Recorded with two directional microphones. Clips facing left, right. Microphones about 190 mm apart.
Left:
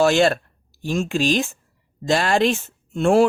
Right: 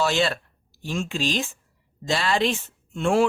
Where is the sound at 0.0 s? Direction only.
50° left (ahead or behind).